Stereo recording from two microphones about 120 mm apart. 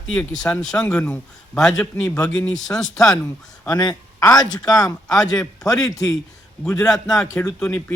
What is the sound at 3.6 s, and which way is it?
Speech, 35° left (ahead or behind).